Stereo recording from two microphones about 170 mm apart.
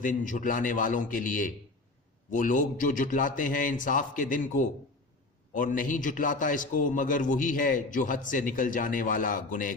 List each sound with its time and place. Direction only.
0.0 s a man's voice: 50° left (ahead or behind)